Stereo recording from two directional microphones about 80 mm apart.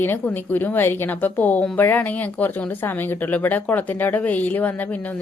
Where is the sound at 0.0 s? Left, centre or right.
Left.